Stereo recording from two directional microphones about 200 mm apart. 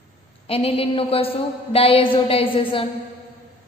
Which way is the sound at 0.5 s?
30° left (ahead or behind).